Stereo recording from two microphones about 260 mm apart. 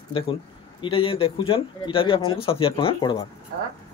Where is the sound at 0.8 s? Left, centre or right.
Centre.